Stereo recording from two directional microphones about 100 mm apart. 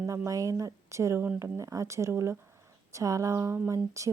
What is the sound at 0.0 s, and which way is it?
Speech, 35° right (ahead or behind).